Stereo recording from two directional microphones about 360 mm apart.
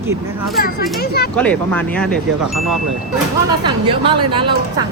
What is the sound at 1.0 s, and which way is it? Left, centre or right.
Speech, left.